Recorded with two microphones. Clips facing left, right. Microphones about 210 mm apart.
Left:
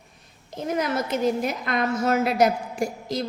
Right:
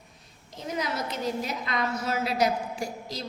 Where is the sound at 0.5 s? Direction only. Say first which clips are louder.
Left 6 dB; 50° left (ahead or behind).